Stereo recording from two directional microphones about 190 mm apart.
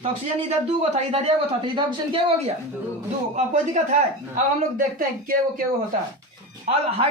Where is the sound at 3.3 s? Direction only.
40° right (ahead or behind).